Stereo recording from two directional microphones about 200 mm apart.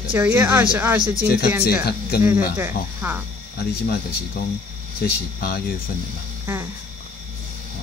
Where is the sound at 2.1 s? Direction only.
50° left (ahead or behind).